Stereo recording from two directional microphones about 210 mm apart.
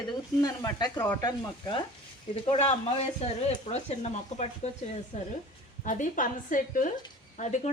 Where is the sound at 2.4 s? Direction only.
25° left (ahead or behind).